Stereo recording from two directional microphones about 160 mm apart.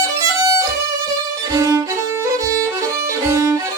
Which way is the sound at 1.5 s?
20° right (ahead or behind).